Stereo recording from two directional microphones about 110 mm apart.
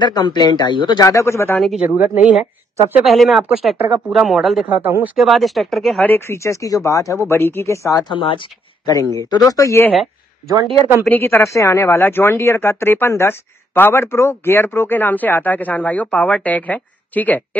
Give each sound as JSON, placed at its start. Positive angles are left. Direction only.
{"t": 0.0, "sound": "speech", "side_deg": 40}
{"t": 1.0, "sound": "speech", "side_deg": 25}
{"t": 1.6, "sound": "speech", "side_deg": 0}
{"t": 2.0, "sound": "speech", "side_deg": -15}
{"t": 4.6, "sound": "speech", "side_deg": -15}
{"t": 5.1, "sound": "speech", "side_deg": 0}
{"t": 6.0, "sound": "speech", "side_deg": 20}
{"t": 8.1, "sound": "speech", "side_deg": 50}
{"t": 9.2, "sound": "speech", "side_deg": 35}
{"t": 11.1, "sound": "speech", "side_deg": 20}